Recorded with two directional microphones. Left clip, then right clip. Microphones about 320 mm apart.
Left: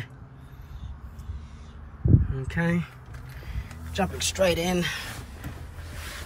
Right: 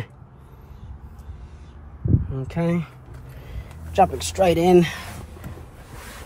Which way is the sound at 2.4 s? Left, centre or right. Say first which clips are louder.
Right 3 dB; centre.